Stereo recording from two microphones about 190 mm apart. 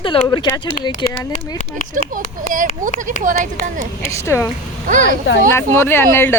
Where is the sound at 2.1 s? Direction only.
45° right (ahead or behind).